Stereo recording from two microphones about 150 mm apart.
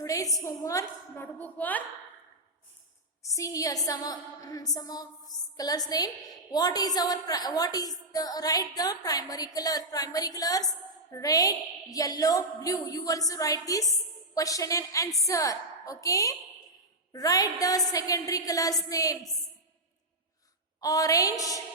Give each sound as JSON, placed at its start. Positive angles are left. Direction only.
{"t": 0.0, "sound": "a woman's voice", "side_deg": 25}
{"t": 3.2, "sound": "a woman's voice", "side_deg": 20}
{"t": 20.8, "sound": "a woman's voice", "side_deg": 25}